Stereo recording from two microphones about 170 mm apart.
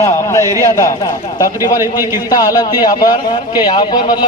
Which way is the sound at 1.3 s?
20° left (ahead or behind).